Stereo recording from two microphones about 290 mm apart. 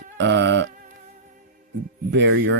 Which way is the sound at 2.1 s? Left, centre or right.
Right.